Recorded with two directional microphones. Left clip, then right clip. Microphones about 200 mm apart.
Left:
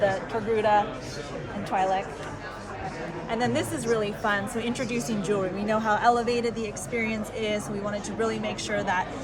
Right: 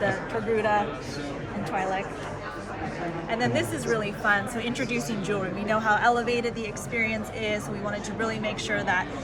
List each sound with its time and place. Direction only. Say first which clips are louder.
0.5 s speech: left 2 dB; 45° left (ahead or behind)
3.2 s a woman's voice: even; 60° left (ahead or behind)